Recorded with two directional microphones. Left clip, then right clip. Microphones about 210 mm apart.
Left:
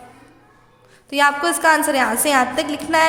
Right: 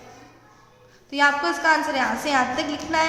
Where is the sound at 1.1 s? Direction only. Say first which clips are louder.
Left 3 dB; 50° left (ahead or behind).